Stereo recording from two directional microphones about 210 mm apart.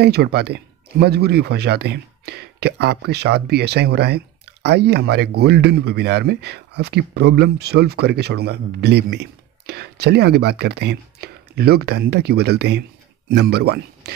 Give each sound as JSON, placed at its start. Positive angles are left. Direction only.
{"t": 0.0, "sound": "speech", "side_deg": -50}